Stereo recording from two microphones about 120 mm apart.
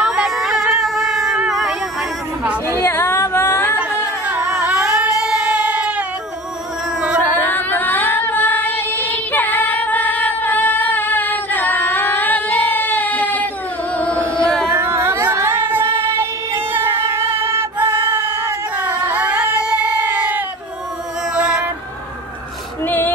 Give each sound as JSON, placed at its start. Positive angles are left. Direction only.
{"t": 0.0, "sound": "a sound", "side_deg": -5}
{"t": 1.5, "sound": "vehicle", "side_deg": 0}
{"t": 2.7, "sound": "female singing", "side_deg": 20}
{"t": 4.3, "sound": "cat", "side_deg": -10}
{"t": 7.2, "sound": "female singing", "side_deg": 15}
{"t": 13.9, "sound": "music", "side_deg": 10}
{"t": 14.8, "sound": "female singing", "side_deg": -20}
{"t": 21.4, "sound": "music", "side_deg": -10}
{"t": 22.8, "sound": "female singing", "side_deg": 15}